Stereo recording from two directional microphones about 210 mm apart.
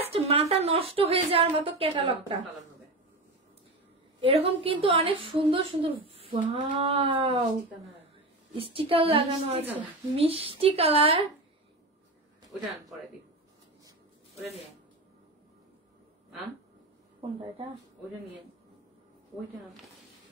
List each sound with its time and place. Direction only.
0.3 s a woman's voice: 30° right (ahead or behind)
4.2 s a woman's voice: 25° right (ahead or behind)
8.5 s a woman's voice: 25° right (ahead or behind)